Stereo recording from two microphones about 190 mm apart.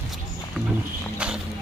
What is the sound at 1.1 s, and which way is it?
Vehicle, 5° right (ahead or behind).